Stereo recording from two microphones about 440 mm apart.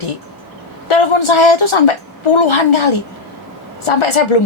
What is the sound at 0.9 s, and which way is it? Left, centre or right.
A woman's voice, left.